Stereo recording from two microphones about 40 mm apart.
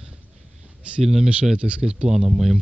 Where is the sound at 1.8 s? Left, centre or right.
Right.